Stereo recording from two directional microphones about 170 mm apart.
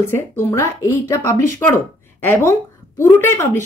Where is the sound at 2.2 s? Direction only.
15° left (ahead or behind).